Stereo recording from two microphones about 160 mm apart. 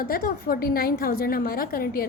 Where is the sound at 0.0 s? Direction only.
65° left (ahead or behind).